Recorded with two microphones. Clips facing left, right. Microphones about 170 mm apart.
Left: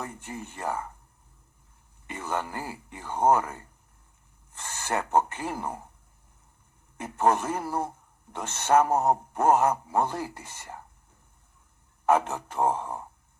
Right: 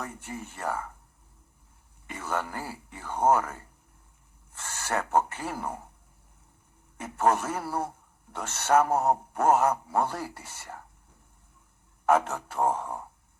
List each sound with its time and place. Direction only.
0.3 s speech: 15° left (ahead or behind)
2.1 s speech: 15° left (ahead or behind)
4.5 s speech: 15° left (ahead or behind)
7.2 s speech: 15° left (ahead or behind)
12.1 s speech: 15° left (ahead or behind)